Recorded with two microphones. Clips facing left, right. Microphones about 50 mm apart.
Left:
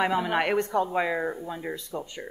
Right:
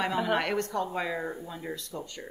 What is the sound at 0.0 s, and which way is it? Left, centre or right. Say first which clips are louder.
A woman's voice: left 3 dB; centre.